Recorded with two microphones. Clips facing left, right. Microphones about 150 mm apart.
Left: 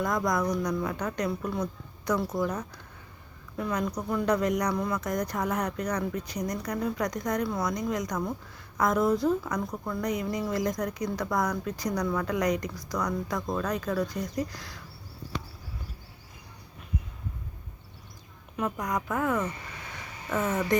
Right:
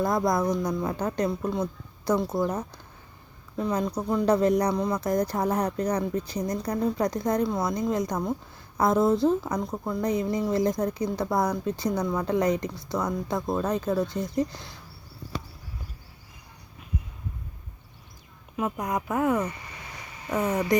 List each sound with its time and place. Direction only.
0.0 s speech: 30° right (ahead or behind)
4.7 s speech: 20° right (ahead or behind)
4.9 s speech: 30° right (ahead or behind)
18.6 s speech: 20° right (ahead or behind)